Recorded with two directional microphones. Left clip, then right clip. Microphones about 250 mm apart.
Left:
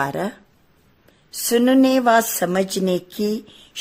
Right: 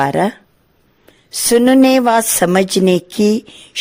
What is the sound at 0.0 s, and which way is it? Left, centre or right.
Speech, right.